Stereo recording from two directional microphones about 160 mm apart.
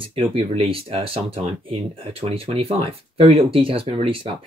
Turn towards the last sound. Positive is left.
turn(degrees=-35)  # may be behind; listen again after turning